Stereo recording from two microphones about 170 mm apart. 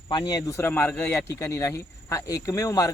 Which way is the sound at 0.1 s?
25° left (ahead or behind).